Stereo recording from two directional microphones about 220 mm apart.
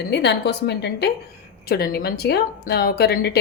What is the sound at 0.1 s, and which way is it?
Speech, 50° left (ahead or behind).